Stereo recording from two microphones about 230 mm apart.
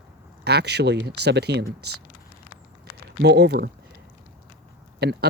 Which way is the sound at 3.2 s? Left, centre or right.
Right.